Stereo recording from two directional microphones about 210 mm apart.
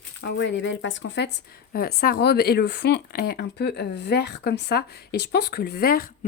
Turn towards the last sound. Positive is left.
turn(degrees=45)  # may be behind; listen again after turning